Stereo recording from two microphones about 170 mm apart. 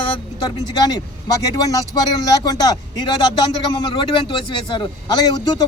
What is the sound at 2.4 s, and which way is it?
Speech, 20° left (ahead or behind).